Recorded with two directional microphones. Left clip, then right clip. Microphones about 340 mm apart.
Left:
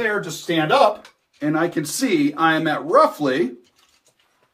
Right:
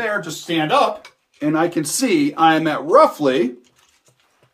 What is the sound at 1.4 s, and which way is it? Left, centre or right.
Speech, right.